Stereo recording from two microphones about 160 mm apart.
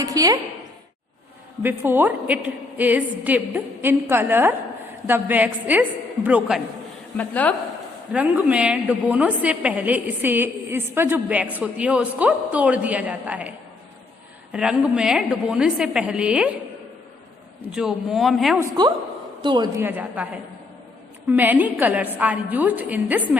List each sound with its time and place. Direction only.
0.0 s a woman's voice: 20° right (ahead or behind)
1.6 s a woman's voice: 15° right (ahead or behind)
7.2 s a woman's voice: 10° left (ahead or behind)
8.1 s a woman's voice: 10° right (ahead or behind)
14.5 s a woman's voice: 5° right (ahead or behind)
17.7 s a woman's voice: 5° right (ahead or behind)
19.4 s a woman's voice: 30° right (ahead or behind)
19.7 s a woman's voice: 10° right (ahead or behind)
21.2 s a woman's voice: 10° right (ahead or behind)